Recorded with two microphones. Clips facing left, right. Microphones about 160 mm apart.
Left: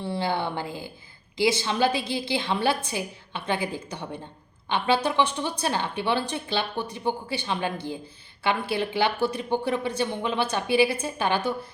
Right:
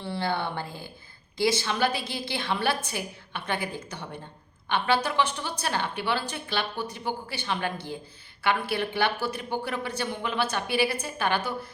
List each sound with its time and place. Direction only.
0.0 s a woman's voice: 20° left (ahead or behind)